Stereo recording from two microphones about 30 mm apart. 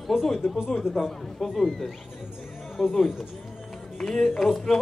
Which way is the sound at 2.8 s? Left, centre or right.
Centre.